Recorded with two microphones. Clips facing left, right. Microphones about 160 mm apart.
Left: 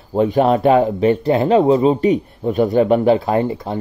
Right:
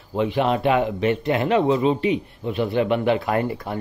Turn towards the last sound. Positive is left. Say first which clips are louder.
# left 5 dB
turn(degrees=25)  # may be behind; listen again after turning